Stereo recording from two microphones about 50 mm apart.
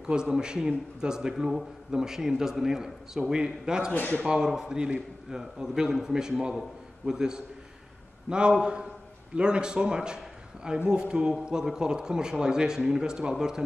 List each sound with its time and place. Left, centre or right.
0.0 s a man's voice: centre
3.9 s speech: left
4.5 s a man's voice: centre